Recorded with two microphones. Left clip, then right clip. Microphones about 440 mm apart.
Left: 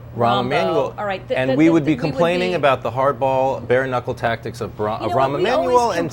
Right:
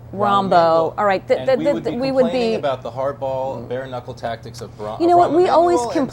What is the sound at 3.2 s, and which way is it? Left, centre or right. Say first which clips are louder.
Speech: left 5 dB; left.